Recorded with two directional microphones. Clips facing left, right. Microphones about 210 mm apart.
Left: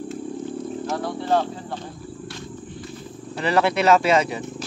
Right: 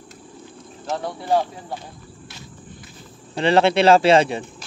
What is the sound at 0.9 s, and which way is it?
Cricket, 15° right (ahead or behind).